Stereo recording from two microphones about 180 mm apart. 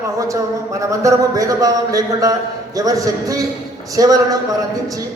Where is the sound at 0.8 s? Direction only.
15° right (ahead or behind).